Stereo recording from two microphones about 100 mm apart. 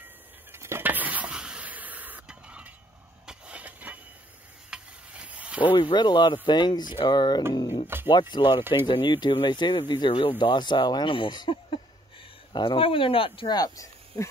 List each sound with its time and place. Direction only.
0.5 s a sound: 25° right (ahead or behind)
5.8 s speech: 50° left (ahead or behind)
7.8 s speech: 20° right (ahead or behind)
8.1 s speech: 50° left (ahead or behind)
13.5 s speech: 40° left (ahead or behind)